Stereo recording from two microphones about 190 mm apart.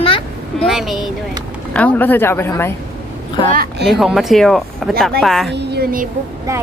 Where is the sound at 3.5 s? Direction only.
50° right (ahead or behind).